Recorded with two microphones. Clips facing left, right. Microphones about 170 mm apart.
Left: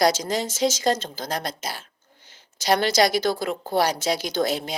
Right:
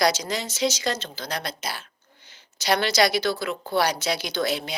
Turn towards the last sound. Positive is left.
turn(degrees=45)  # may be behind; listen again after turning